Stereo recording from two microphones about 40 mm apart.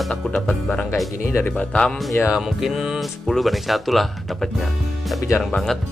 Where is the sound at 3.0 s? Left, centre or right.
Centre.